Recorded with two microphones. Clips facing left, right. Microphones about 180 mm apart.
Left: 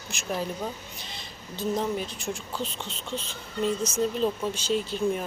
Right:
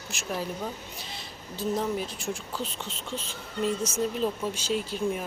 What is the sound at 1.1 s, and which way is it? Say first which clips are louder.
Speech: even; 5° right (ahead or behind).